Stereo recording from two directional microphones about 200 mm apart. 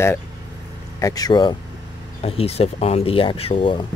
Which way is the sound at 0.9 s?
15° left (ahead or behind).